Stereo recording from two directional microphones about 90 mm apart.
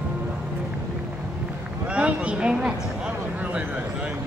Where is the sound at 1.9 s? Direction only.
15° right (ahead or behind).